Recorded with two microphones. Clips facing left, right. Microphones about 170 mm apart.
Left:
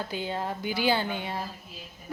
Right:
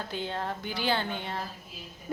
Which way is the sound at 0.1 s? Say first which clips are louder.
Left 2 dB; 5° left (ahead or behind).